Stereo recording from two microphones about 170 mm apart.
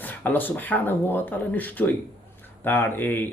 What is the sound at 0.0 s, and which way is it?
Speech, 10° left (ahead or behind).